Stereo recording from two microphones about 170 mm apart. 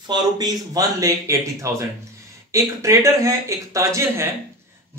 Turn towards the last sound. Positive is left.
turn(degrees=-15)  # may be behind; listen again after turning